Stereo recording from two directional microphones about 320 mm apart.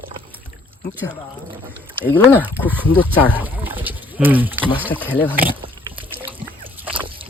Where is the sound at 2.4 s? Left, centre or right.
Centre.